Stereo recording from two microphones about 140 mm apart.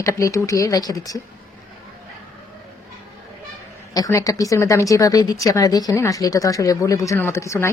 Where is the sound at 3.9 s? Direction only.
25° left (ahead or behind).